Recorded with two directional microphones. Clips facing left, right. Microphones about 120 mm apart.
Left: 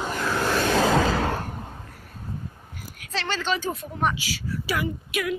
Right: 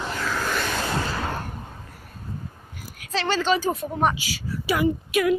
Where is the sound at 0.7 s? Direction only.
90° left.